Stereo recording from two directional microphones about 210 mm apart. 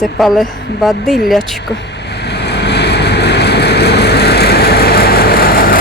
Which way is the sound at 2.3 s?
55° left (ahead or behind).